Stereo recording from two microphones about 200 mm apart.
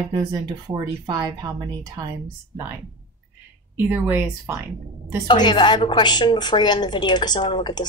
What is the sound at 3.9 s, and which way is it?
Speech, 10° right (ahead or behind).